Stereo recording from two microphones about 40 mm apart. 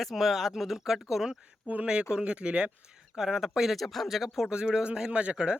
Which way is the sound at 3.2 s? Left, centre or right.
Centre.